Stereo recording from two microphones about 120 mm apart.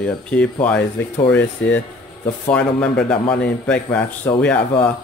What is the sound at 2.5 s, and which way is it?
A man's voice, 10° left (ahead or behind).